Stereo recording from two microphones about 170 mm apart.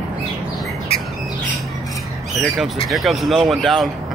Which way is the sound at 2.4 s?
Centre (ahead or behind).